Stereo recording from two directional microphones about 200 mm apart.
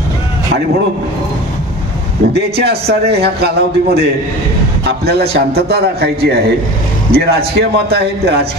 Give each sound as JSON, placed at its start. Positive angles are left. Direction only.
{"t": 2.3, "sound": "a man's voice", "side_deg": -55}
{"t": 5.0, "sound": "a man's voice", "side_deg": -55}